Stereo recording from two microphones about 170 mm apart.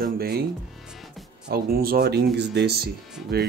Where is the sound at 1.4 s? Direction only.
65° right (ahead or behind).